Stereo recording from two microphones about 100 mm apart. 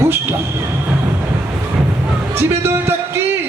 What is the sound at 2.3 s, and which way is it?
Speech, 25° right (ahead or behind).